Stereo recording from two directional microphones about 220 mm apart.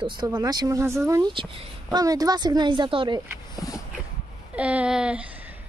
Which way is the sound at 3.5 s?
15° left (ahead or behind).